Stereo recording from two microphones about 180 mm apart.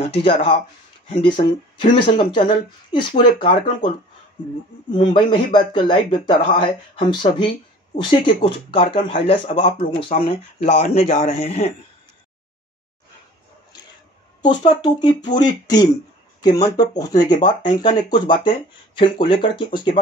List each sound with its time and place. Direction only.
0.0 s a man's voice: 30° left (ahead or behind)
4.9 s a man's voice: 25° left (ahead or behind)
11.0 s a man's voice: 45° left (ahead or behind)
14.6 s speech: 25° left (ahead or behind)